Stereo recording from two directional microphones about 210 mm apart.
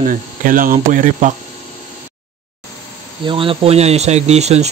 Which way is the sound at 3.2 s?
25° right (ahead or behind).